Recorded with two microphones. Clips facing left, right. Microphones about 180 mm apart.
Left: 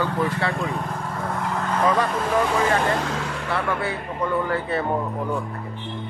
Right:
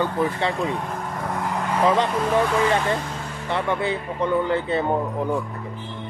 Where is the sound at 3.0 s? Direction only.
90° left.